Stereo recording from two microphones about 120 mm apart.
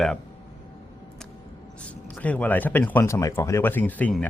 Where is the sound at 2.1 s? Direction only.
10° left (ahead or behind).